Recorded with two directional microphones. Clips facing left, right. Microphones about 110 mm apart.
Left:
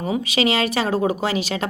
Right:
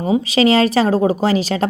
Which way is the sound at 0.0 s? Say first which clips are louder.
Right 6 dB; 30° right (ahead or behind).